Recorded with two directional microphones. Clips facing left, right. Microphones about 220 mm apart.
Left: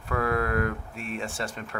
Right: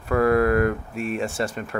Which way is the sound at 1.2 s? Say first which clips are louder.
Right 7 dB; 45° right (ahead or behind).